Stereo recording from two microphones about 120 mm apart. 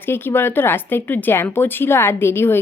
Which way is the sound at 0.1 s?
20° left (ahead or behind).